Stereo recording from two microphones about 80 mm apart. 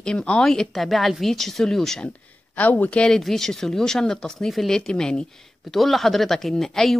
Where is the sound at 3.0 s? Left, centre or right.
Centre.